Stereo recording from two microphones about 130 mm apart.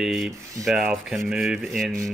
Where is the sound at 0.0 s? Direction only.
Centre (ahead or behind).